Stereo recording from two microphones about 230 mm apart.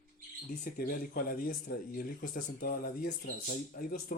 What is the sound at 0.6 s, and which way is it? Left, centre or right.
Speech, left.